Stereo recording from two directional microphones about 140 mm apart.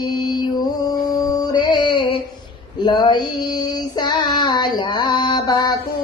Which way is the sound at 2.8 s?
35° left (ahead or behind).